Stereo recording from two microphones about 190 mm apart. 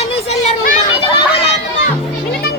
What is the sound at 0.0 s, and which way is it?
Children playing, 35° left (ahead or behind).